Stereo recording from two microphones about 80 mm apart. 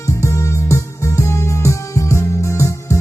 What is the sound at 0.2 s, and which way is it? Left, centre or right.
Music, left.